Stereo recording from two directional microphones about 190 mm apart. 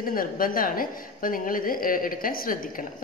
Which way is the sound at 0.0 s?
50° left (ahead or behind).